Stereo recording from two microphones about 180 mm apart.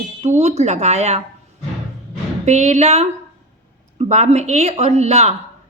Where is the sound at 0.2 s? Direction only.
35° right (ahead or behind).